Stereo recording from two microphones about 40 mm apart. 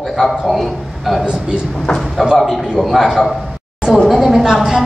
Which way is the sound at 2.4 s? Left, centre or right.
Centre.